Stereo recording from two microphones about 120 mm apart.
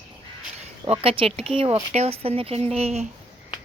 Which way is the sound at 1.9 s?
60° right (ahead or behind).